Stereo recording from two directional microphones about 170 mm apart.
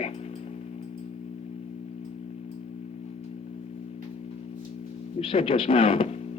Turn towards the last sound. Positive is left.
turn(degrees=30)  # may be behind; listen again after turning